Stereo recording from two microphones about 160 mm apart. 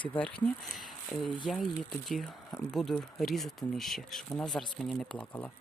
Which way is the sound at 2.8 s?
Centre (ahead or behind).